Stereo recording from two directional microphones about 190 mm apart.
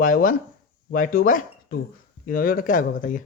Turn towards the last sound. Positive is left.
turn(degrees=45)  # may be behind; listen again after turning